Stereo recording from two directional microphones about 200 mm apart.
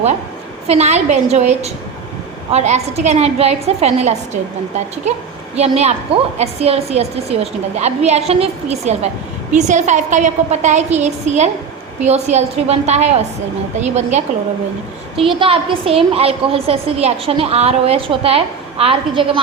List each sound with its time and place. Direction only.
0.7 s a woman's voice: 35° right (ahead or behind)
5.5 s a woman's voice: 30° right (ahead or behind)